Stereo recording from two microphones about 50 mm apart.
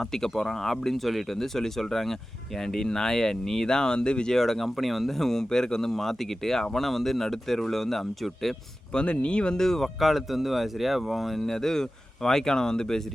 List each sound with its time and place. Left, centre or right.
0.0 s speech: centre
4.4 s speech: centre
8.9 s speech: left
9.6 s speech: centre